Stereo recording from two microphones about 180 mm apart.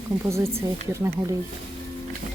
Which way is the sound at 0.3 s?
15° right (ahead or behind).